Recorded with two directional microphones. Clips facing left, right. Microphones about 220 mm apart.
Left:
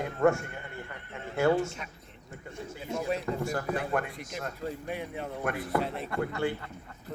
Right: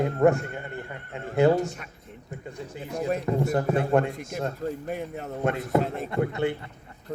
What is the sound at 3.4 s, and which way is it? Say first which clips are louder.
Speech: right 7 dB; 25° right (ahead or behind).